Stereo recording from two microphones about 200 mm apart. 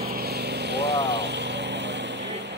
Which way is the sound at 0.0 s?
50° right (ahead or behind).